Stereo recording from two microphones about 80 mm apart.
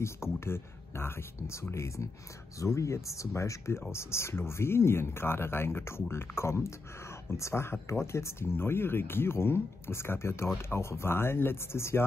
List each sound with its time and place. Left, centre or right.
0.0 s speech: left